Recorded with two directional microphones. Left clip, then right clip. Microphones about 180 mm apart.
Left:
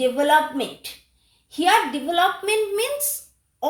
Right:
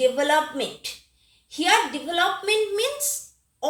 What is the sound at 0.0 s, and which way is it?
Speech, 45° left (ahead or behind).